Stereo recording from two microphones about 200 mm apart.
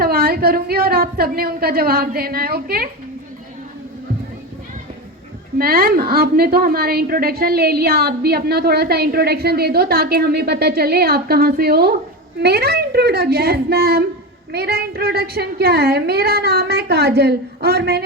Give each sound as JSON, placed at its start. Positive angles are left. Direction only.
{"t": 0.0, "sound": "a woman's voice", "side_deg": -50}
{"t": 5.5, "sound": "a woman's voice", "side_deg": -45}